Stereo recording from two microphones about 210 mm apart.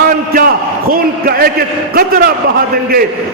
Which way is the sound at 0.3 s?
45° right (ahead or behind).